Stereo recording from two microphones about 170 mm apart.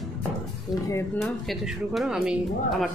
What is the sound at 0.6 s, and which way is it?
Speech, 15° left (ahead or behind).